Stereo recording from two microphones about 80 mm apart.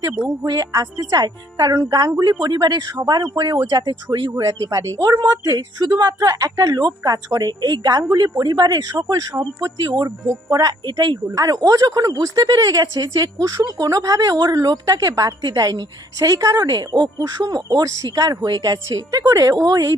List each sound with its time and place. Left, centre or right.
0.3 s speech: right
1.7 s speech: right
4.3 s speech: right
11.3 s speech: right